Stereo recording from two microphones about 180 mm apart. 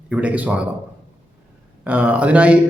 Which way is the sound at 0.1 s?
5° right (ahead or behind).